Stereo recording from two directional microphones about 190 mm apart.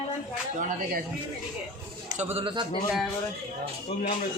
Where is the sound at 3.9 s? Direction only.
30° left (ahead or behind).